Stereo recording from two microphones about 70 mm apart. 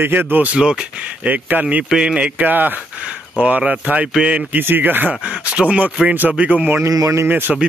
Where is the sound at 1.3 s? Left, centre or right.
Right.